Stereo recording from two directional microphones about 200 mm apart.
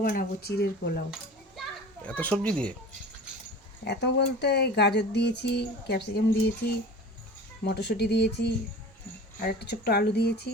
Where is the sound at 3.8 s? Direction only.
55° left (ahead or behind).